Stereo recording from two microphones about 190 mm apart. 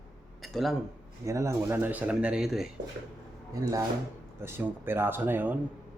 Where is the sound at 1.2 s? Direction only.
15° right (ahead or behind).